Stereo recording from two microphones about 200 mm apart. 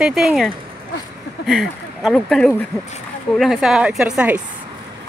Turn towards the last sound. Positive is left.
turn(degrees=-5)  # may be behind; listen again after turning